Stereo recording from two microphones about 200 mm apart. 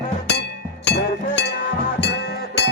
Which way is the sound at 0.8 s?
55° left (ahead or behind).